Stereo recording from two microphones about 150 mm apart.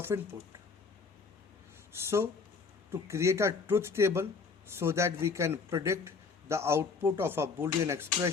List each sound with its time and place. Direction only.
0.1 s speech: 25° right (ahead or behind)
1.9 s a man's voice: 15° right (ahead or behind)